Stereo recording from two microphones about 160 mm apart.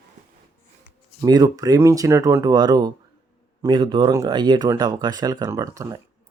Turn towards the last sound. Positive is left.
turn(degrees=-20)  # may be behind; listen again after turning